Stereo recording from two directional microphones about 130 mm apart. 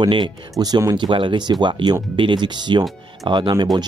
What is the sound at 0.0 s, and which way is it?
Speech, 35° right (ahead or behind).